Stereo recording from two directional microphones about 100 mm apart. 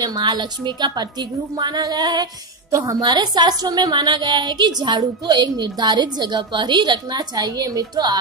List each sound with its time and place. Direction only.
0.0 s a woman's voice: 45° right (ahead or behind)